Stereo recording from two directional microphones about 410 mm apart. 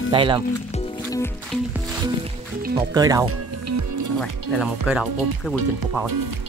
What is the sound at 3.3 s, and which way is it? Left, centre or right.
Music, right.